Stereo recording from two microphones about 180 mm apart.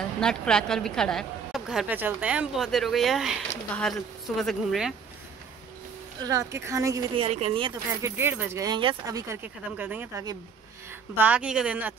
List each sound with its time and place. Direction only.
0.2 s a woman's voice: 5° left (ahead or behind)
6.2 s speech: 15° right (ahead or behind)
7.2 s speech: 35° right (ahead or behind)
8.0 s speech: 10° right (ahead or behind)